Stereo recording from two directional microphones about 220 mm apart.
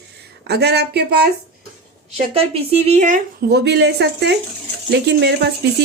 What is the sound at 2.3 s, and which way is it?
Speech, 25° right (ahead or behind).